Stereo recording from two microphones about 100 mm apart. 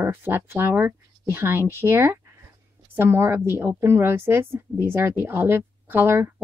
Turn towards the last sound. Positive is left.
turn(degrees=-25)  # may be behind; listen again after turning